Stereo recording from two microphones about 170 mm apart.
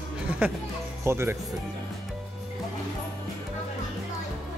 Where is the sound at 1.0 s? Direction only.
15° right (ahead or behind).